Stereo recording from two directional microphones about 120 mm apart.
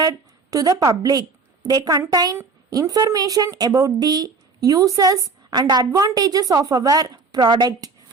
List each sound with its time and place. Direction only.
0.0 s a woman's voice: 30° right (ahead or behind)